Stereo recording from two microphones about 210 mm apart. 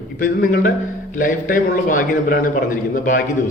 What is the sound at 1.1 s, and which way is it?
A man's voice, 40° left (ahead or behind).